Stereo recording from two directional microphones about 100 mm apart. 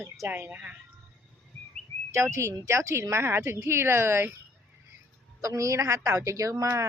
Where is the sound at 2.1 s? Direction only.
30° right (ahead or behind).